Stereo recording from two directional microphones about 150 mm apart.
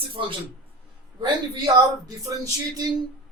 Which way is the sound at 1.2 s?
25° right (ahead or behind).